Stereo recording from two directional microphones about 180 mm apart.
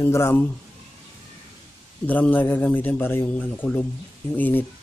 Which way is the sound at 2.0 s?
10° left (ahead or behind).